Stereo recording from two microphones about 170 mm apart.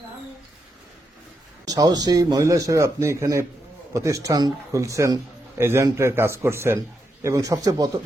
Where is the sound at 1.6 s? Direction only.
20° right (ahead or behind).